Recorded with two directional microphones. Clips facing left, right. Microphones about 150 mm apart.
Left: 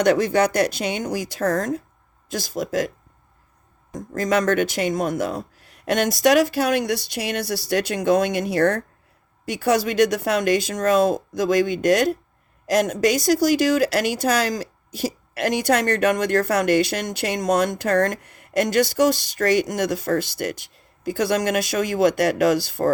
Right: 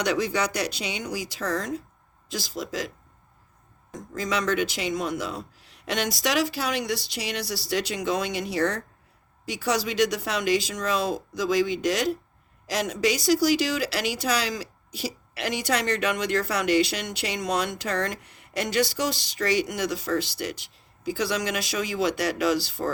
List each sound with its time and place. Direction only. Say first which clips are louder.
0.0 s a woman's voice: left 8 dB; 50° left (ahead or behind)
4.1 s a woman's voice: left 6 dB; 50° left (ahead or behind)